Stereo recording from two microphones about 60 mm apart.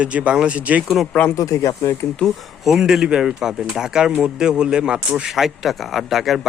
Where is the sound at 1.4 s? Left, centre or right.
Left.